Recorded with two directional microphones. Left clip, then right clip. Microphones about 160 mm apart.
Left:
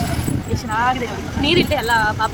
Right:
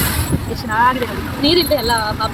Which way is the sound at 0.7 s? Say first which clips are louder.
Right 4 dB; centre (ahead or behind).